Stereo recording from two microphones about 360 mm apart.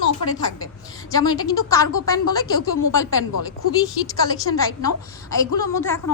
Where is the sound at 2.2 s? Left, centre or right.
Left.